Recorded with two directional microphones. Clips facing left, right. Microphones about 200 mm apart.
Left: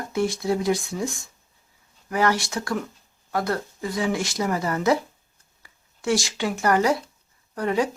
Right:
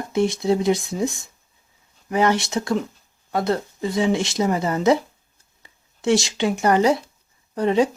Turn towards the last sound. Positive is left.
turn(degrees=-25)  # may be behind; listen again after turning